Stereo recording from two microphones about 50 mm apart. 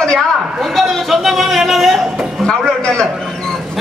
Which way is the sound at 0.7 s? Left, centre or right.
Centre.